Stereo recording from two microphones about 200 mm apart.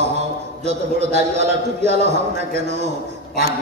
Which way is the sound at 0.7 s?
35° right (ahead or behind).